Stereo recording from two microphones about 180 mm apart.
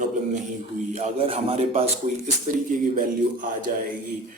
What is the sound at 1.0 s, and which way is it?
Speech, 35° right (ahead or behind).